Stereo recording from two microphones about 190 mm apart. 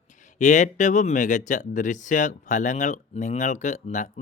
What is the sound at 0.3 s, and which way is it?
Speech, 40° left (ahead or behind).